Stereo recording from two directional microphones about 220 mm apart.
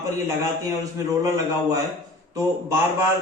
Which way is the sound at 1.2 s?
15° right (ahead or behind).